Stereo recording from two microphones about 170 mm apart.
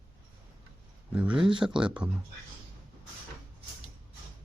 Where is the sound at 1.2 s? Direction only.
5° right (ahead or behind).